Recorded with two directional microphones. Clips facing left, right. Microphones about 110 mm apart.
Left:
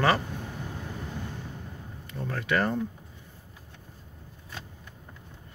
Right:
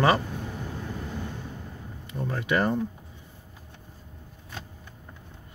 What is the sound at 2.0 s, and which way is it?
Speech, 15° right (ahead or behind).